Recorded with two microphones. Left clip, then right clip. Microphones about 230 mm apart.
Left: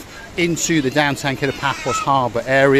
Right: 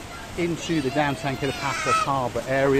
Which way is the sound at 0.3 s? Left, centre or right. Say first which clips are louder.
Left 8 dB; left.